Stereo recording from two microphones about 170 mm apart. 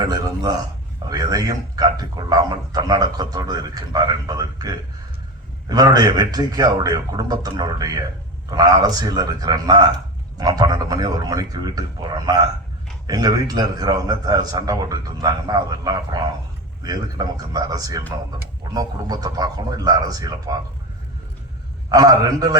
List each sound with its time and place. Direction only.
0.0 s a man's voice: 25° right (ahead or behind)
21.8 s a man's voice: 20° right (ahead or behind)